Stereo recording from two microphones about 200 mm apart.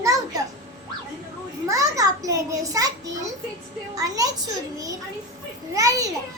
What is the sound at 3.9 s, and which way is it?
A child's voice, 15° right (ahead or behind).